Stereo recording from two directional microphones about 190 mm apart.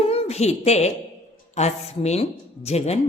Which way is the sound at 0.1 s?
30° left (ahead or behind).